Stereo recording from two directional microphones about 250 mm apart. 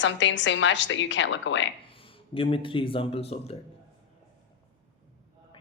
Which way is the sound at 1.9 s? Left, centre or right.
Left.